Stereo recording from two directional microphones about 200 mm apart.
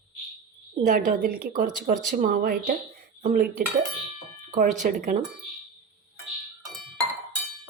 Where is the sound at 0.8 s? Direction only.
40° right (ahead or behind).